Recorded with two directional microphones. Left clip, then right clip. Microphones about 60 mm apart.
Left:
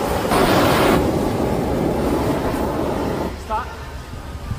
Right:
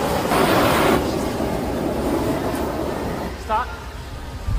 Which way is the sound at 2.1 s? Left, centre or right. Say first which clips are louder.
Left 2 dB; centre.